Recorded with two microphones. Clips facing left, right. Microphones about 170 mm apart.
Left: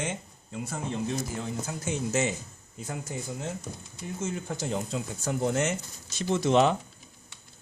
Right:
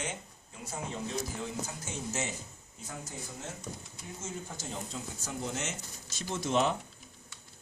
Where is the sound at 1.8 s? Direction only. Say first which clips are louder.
Left 12 dB; 75° left (ahead or behind).